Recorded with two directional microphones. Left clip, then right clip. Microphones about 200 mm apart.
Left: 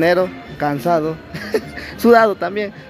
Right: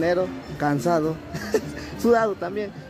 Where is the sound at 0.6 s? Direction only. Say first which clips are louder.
Left 5 dB; 5° right (ahead or behind).